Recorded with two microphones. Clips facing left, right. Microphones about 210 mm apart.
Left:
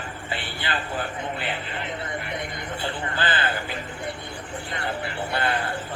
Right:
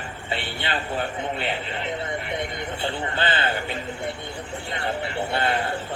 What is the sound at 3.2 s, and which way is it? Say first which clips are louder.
A man's voice: right 1 dB; 25° right (ahead or behind).